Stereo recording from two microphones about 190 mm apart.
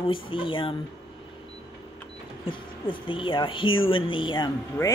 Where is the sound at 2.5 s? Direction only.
25° left (ahead or behind).